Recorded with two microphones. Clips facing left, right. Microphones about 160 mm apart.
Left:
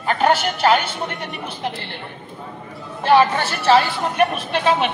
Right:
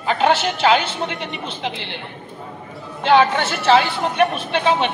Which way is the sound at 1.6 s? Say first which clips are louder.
Left 1 dB; 85° right.